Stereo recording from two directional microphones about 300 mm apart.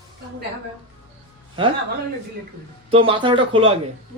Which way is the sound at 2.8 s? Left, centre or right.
Centre.